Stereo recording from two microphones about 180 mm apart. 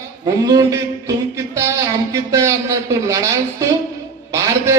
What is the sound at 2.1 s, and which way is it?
A man's voice, 15° right (ahead or behind).